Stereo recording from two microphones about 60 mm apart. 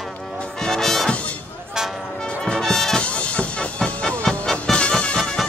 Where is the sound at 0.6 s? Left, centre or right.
Centre.